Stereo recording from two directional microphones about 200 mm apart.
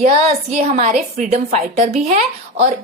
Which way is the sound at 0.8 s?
35° right (ahead or behind).